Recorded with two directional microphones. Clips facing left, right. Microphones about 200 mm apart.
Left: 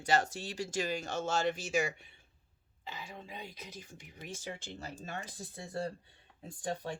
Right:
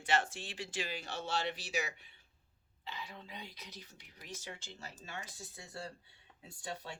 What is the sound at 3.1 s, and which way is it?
Speech, 50° left (ahead or behind).